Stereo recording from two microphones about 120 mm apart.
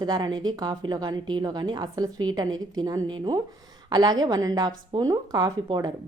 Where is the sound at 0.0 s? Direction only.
35° right (ahead or behind).